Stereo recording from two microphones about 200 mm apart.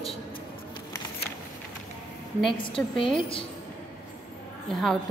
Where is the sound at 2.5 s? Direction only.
25° left (ahead or behind).